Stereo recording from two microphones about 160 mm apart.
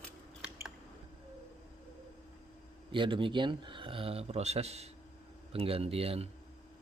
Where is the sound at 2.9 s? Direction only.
30° right (ahead or behind).